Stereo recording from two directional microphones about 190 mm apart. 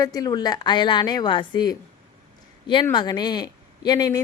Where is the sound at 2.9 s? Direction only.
20° left (ahead or behind).